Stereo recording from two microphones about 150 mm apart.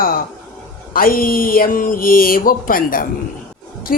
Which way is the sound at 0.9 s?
70° left (ahead or behind).